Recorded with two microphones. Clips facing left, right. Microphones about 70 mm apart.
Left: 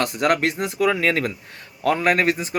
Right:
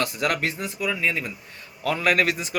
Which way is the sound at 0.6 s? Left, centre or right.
Left.